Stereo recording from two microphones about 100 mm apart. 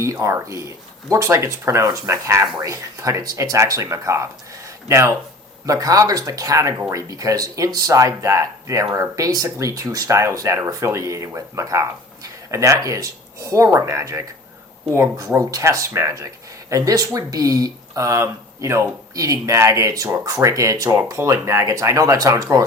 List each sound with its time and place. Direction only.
0.0 s speech: 30° right (ahead or behind)
4.6 s a sound: 30° right (ahead or behind)
5.6 s speech: 35° right (ahead or behind)